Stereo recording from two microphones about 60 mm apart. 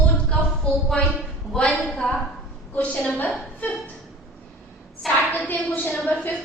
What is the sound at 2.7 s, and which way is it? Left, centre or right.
Speech, left.